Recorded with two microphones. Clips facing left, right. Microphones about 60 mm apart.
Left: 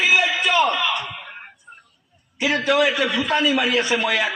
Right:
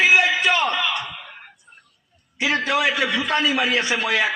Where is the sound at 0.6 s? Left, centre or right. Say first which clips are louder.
Left 1 dB; centre.